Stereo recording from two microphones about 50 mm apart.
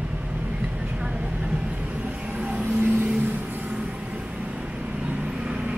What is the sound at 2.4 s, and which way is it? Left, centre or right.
Vehicle, right.